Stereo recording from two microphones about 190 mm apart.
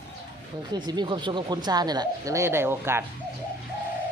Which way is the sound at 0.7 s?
20° right (ahead or behind).